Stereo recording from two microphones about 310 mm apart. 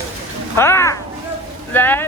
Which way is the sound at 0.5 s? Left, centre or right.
Centre.